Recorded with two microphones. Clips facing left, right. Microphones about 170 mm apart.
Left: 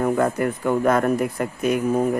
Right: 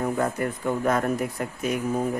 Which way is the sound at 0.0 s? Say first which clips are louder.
Left 5 dB; 70° left (ahead or behind).